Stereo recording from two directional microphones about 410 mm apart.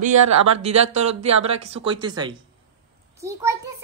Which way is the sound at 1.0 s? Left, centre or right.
Centre.